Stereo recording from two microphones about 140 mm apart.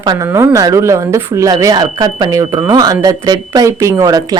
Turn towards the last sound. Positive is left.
turn(degrees=-25)  # may be behind; listen again after turning